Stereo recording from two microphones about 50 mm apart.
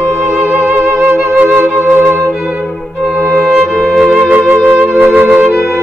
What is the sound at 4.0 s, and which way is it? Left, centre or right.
Music, right.